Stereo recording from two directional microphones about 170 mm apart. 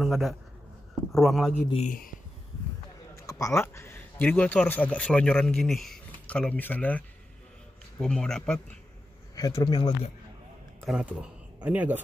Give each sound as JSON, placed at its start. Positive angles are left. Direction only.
{"t": 0.0, "sound": "a man's voice", "side_deg": 0}
{"t": 1.7, "sound": "speech", "side_deg": 45}
{"t": 3.3, "sound": "speech", "side_deg": 20}
{"t": 9.3, "sound": "speech", "side_deg": 20}
{"t": 10.8, "sound": "speech", "side_deg": -5}